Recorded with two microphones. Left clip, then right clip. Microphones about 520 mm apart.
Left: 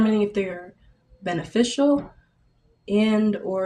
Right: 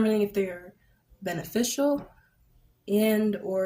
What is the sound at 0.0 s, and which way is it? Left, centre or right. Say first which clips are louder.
Speech: left 3 dB; right.